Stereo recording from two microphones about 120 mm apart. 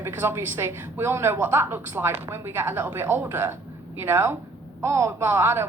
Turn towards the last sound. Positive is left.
turn(degrees=-20)  # may be behind; listen again after turning